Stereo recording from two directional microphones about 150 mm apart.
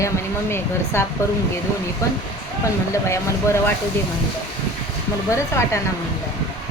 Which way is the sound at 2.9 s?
20° left (ahead or behind).